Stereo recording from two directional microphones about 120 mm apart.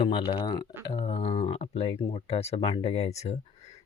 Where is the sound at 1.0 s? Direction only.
60° left (ahead or behind).